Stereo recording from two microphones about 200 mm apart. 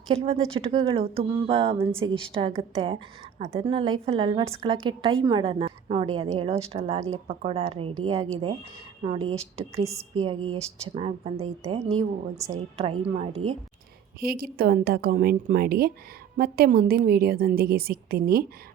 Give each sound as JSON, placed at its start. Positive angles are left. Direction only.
{"t": 0.1, "sound": "a woman's voice", "side_deg": -30}
{"t": 9.8, "sound": "a woman's voice", "side_deg": -15}
{"t": 13.0, "sound": "a woman's voice", "side_deg": -30}
{"t": 14.2, "sound": "a woman's voice", "side_deg": -50}